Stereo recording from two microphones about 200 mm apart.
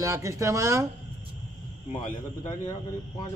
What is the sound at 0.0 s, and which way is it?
Speech, 15° right (ahead or behind).